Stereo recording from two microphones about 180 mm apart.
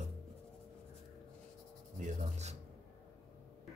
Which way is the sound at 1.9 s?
40° right (ahead or behind).